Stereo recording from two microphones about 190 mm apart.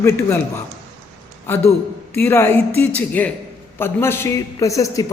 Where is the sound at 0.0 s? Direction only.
10° left (ahead or behind).